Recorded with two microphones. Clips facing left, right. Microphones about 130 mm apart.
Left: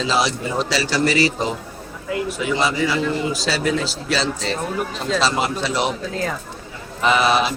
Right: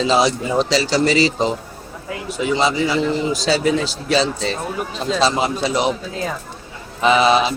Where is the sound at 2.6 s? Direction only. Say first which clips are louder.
Right 2 dB; 25° right (ahead or behind).